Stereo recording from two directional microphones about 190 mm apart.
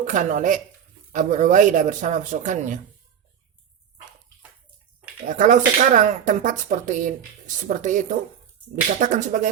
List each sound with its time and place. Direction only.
0.0 s speech: 40° right (ahead or behind)
5.2 s speech: 40° right (ahead or behind)